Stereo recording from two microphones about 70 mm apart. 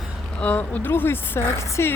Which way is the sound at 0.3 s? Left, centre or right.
Left.